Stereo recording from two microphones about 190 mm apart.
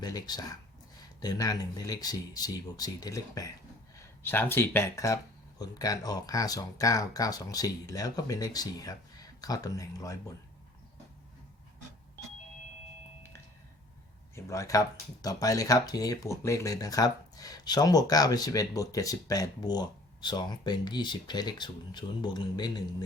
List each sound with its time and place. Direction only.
0.0 s speech: 20° left (ahead or behind)
14.3 s speech: 15° left (ahead or behind)